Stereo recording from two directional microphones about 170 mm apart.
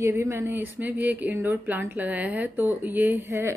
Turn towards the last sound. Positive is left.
turn(degrees=-15)  # may be behind; listen again after turning